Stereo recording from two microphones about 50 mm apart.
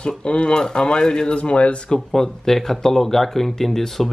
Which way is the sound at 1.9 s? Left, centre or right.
Centre.